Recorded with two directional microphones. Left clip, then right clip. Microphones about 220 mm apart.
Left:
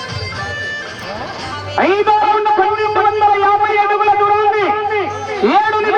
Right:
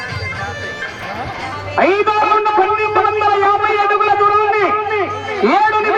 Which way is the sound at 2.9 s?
45° right (ahead or behind).